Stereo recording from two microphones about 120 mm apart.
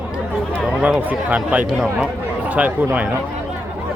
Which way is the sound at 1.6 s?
Centre (ahead or behind).